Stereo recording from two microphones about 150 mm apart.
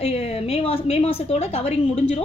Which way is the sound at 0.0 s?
40° left (ahead or behind).